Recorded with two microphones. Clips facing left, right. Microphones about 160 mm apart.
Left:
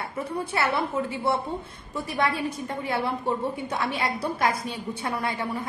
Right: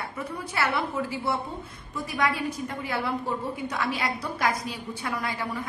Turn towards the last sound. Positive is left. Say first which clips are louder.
# left 2 dB
turn(degrees=25)  # may be behind; listen again after turning